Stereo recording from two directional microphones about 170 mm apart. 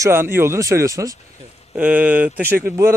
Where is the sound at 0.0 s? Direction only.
15° right (ahead or behind).